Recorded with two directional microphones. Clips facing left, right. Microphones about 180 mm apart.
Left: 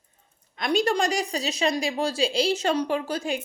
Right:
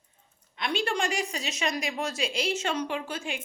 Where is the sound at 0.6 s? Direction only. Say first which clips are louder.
Left 6 dB; 40° left (ahead or behind).